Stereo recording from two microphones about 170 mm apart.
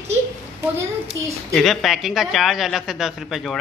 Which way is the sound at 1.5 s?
Centre (ahead or behind).